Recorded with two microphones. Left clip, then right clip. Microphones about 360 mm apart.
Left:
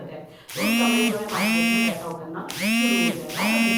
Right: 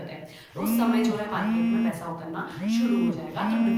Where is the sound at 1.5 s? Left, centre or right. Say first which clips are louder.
Left 6 dB; left.